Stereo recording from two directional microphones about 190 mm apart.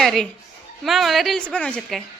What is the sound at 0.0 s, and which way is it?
A woman's voice, centre (ahead or behind).